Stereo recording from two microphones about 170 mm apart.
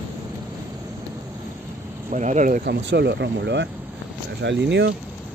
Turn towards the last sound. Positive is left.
turn(degrees=-90)